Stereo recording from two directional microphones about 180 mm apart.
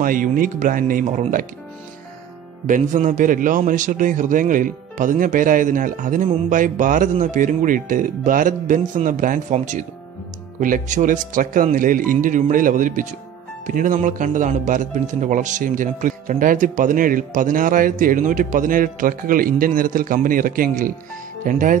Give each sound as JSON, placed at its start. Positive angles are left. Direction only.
{"t": 0.0, "sound": "a man's voice", "side_deg": -50}
{"t": 2.6, "sound": "a man's voice", "side_deg": -45}